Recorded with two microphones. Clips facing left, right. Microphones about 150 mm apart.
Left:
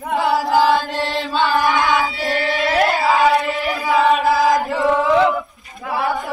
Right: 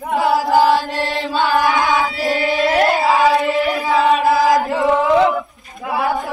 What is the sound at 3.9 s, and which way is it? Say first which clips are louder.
Chant: left 1 dB; centre (ahead or behind).